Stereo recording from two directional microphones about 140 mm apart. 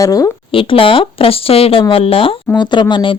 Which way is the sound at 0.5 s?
40° left (ahead or behind).